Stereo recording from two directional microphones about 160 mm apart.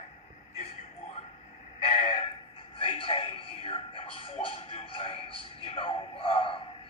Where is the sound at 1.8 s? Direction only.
35° left (ahead or behind).